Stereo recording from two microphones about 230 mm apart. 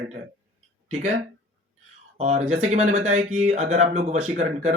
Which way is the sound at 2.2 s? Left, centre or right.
Right.